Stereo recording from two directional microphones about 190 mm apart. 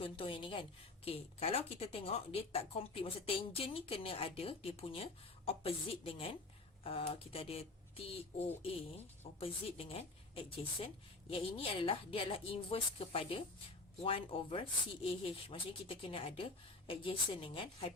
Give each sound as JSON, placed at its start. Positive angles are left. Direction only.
{"t": 0.0, "sound": "a woman's voice", "side_deg": 30}